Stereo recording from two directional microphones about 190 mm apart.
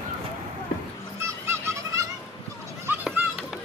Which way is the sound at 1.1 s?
15° right (ahead or behind).